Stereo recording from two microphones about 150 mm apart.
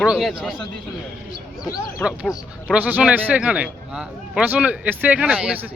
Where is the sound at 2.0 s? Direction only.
15° left (ahead or behind).